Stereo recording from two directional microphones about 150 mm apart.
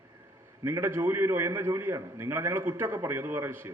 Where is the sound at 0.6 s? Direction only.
15° right (ahead or behind).